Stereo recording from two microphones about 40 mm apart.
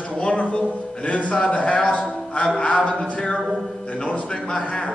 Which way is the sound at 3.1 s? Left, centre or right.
Left.